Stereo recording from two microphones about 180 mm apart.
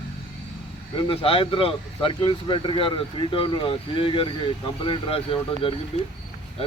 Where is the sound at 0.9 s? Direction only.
30° left (ahead or behind).